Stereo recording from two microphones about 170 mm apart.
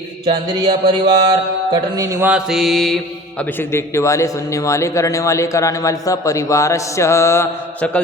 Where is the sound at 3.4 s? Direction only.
10° left (ahead or behind).